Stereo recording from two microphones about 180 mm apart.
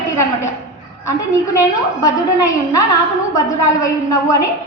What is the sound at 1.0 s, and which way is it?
A woman's voice, 15° left (ahead or behind).